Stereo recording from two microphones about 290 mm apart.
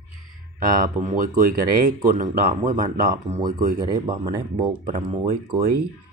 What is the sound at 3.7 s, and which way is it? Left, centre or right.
Speech, centre.